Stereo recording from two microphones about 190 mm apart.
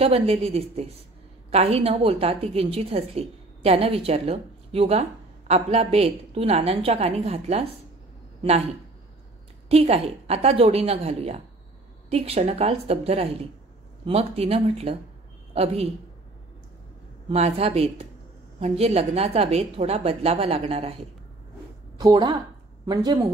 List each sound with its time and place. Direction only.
0.0 s a woman's voice: 30° right (ahead or behind)
9.7 s a woman's voice: 35° right (ahead or behind)
17.3 s a woman's voice: 35° right (ahead or behind)
21.9 s speech: 20° right (ahead or behind)